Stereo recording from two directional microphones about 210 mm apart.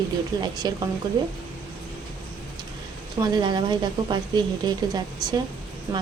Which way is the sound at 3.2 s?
20° right (ahead or behind).